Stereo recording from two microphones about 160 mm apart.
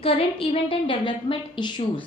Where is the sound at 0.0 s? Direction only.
35° left (ahead or behind).